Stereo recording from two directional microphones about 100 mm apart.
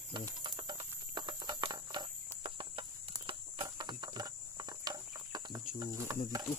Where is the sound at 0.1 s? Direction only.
50° right (ahead or behind).